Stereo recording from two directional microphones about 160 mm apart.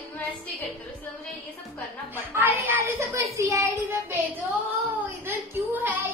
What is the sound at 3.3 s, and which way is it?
Child singing, 20° right (ahead or behind).